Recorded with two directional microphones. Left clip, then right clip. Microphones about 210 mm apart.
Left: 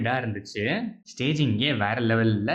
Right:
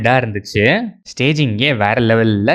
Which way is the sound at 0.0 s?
40° right (ahead or behind).